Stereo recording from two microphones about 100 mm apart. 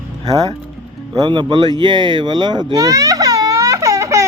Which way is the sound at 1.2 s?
50° right (ahead or behind).